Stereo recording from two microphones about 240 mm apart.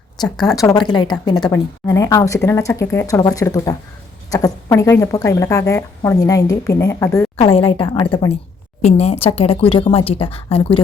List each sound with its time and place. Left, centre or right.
0.5 s a woman's voice: centre
7.3 s speech: left